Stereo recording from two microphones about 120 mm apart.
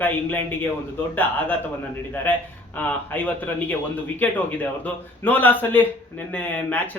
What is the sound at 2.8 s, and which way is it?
Speech, 15° left (ahead or behind).